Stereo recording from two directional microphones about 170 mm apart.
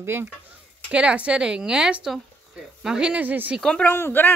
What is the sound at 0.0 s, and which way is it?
Speech, 15° right (ahead or behind).